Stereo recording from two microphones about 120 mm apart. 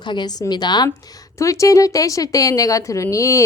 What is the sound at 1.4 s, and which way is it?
A woman's voice, 25° left (ahead or behind).